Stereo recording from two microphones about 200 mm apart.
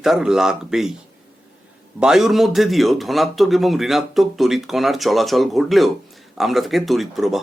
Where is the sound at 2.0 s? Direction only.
Centre (ahead or behind).